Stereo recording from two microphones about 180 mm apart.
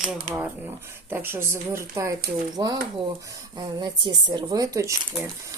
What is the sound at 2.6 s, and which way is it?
Speech, 25° right (ahead or behind).